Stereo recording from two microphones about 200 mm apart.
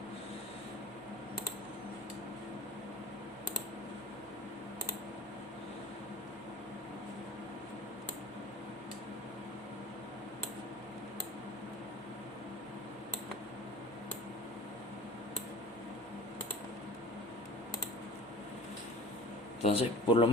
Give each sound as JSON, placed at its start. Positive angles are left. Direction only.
{"t": 19.6, "sound": "speech", "side_deg": 30}